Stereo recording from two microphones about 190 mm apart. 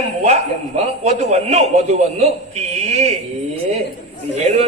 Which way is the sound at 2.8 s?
35° right (ahead or behind).